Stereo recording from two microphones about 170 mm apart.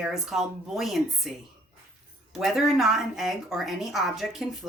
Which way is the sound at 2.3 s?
Centre (ahead or behind).